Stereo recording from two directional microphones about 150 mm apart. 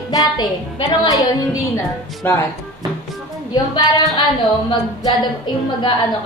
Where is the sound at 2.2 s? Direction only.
15° left (ahead or behind).